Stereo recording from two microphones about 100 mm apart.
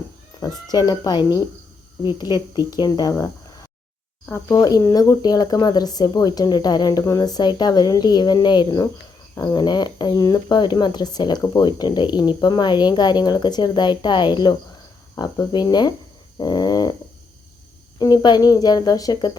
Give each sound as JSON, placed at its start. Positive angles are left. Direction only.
{"t": 0.3, "sound": "speech", "side_deg": 40}
{"t": 4.3, "sound": "speech", "side_deg": 30}
{"t": 18.0, "sound": "speech", "side_deg": 45}